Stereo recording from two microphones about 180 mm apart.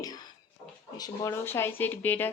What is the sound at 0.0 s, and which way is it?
Music, 20° left (ahead or behind).